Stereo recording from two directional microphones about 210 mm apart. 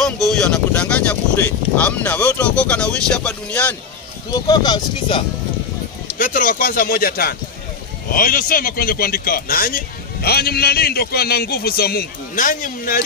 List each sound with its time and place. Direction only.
0.0 s a sound: centre (ahead or behind)
1.8 s speech: 5° left (ahead or behind)
4.3 s speech: 20° left (ahead or behind)
6.1 s a man's voice: 40° left (ahead or behind)